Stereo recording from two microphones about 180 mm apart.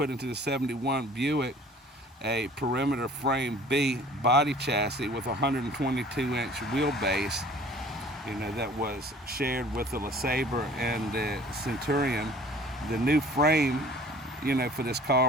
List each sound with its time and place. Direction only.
0.0 s speech: 65° right (ahead or behind)
8.4 s speech: 65° right (ahead or behind)